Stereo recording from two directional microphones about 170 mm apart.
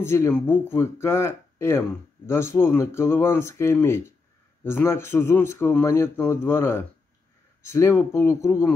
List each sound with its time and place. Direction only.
0.0 s speech: 15° left (ahead or behind)